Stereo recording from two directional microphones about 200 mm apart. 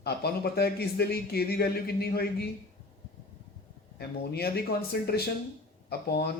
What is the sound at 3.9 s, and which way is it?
A man's voice, 50° left (ahead or behind).